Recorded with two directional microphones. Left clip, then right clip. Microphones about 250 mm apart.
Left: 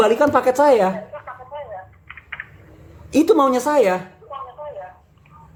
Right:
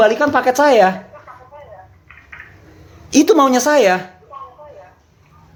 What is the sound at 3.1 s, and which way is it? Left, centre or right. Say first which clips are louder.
Speech: right 3 dB; centre.